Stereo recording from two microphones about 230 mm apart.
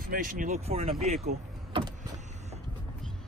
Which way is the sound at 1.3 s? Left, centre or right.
Centre.